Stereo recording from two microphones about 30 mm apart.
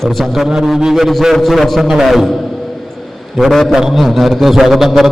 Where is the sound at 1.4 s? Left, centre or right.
Centre.